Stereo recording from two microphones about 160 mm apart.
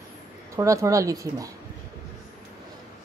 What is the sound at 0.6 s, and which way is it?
Speech, 20° right (ahead or behind).